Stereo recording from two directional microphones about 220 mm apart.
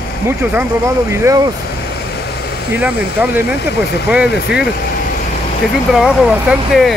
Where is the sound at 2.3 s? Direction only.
50° left (ahead or behind).